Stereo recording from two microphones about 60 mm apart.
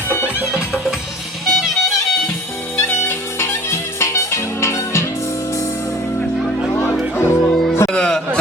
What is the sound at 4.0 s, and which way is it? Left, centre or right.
Music, left.